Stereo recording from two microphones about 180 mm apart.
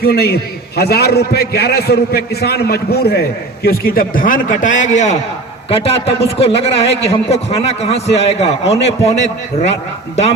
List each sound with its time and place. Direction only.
0.0 s a man's voice: 60° left (ahead or behind); by 9.7 s 35° left (ahead or behind)